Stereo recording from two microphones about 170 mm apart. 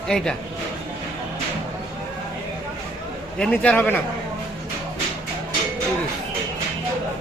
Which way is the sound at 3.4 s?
5° left (ahead or behind).